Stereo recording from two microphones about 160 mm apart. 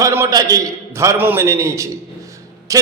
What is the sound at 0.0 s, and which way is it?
A man's voice, 20° right (ahead or behind).